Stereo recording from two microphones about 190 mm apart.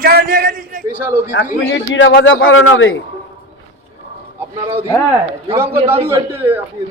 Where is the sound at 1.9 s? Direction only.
70° left (ahead or behind); by 2.9 s 90° left.